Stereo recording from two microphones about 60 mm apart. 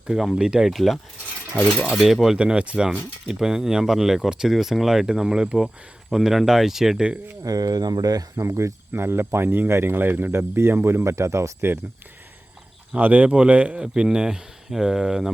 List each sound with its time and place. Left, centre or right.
0.2 s speech: centre
0.7 s speech: centre
2.4 s speech: centre
7.4 s speech: right
8.4 s speech: right
8.9 s speech: right
13.0 s speech: right; by 15.3 s centre